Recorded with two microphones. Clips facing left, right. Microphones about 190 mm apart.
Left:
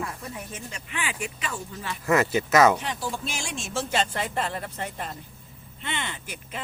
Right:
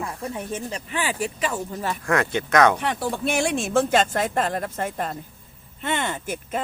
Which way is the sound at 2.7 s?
60° right (ahead or behind).